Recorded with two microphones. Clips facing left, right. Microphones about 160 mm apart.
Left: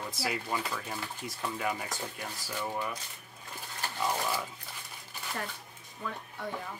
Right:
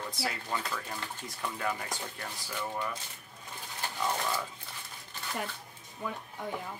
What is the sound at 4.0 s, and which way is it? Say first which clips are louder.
Speech: left 1 dB; 10° left (ahead or behind).